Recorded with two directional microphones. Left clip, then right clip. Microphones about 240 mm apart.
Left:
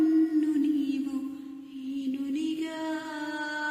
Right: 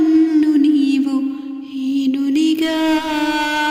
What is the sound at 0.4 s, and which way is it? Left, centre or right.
Music, right.